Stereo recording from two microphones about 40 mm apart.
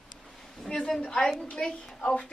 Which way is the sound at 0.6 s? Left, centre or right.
Left.